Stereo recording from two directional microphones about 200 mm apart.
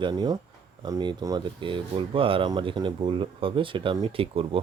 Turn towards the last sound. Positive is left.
turn(degrees=-30)  # may be behind; listen again after turning